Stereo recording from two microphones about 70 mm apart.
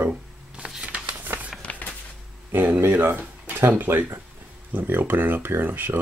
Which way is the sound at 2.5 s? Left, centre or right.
Right.